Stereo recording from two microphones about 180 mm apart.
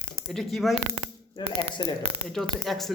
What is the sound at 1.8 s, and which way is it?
Speech, 25° left (ahead or behind).